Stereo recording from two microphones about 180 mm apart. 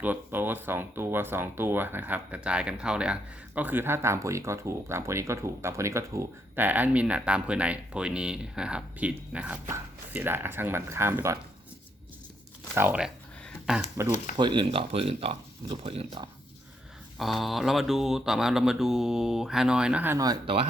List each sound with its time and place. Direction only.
0.0 s speech: 10° right (ahead or behind)
12.7 s speech: 10° right (ahead or behind)
14.3 s speech: 25° right (ahead or behind)
17.2 s mantra: centre (ahead or behind); by 20.4 s 20° right (ahead or behind)